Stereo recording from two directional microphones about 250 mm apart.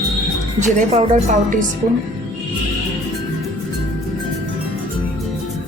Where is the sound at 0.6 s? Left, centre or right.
Right.